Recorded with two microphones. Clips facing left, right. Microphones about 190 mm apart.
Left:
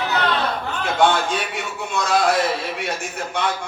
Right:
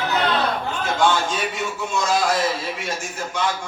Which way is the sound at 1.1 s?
60° left (ahead or behind).